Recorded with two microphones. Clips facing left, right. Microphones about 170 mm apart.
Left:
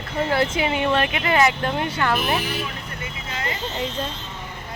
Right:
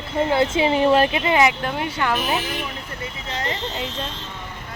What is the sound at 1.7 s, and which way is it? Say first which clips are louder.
Speech: left 1 dB; 5° right (ahead or behind).